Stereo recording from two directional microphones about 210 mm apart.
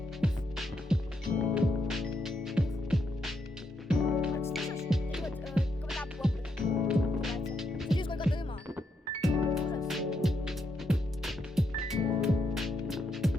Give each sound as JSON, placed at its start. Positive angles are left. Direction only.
{"t": 0.2, "sound": "music", "side_deg": 0}
{"t": 7.9, "sound": "music", "side_deg": 25}
{"t": 9.2, "sound": "music", "side_deg": 0}